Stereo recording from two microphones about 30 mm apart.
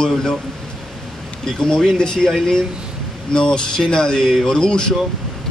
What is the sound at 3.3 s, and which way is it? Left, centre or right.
A man's voice, left.